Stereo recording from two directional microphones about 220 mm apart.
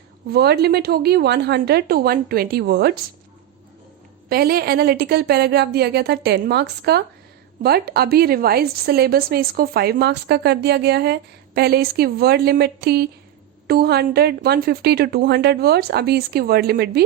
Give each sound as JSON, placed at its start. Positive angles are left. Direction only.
{"t": 0.3, "sound": "a woman's voice", "side_deg": -45}
{"t": 4.3, "sound": "a woman's voice", "side_deg": -45}